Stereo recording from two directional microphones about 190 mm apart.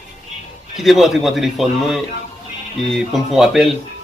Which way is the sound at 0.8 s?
Centre (ahead or behind).